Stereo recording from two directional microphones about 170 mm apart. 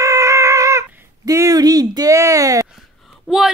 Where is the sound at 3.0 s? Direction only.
Centre (ahead or behind).